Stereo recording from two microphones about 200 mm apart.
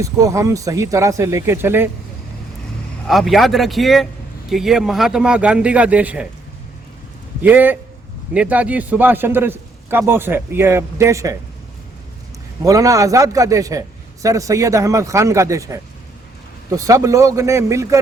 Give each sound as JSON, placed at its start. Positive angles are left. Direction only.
{"t": 0.0, "sound": "a man's voice", "side_deg": -15}
{"t": 3.1, "sound": "a man's voice", "side_deg": 0}
{"t": 7.4, "sound": "a man's voice", "side_deg": -10}
{"t": 12.6, "sound": "a man's voice", "side_deg": -15}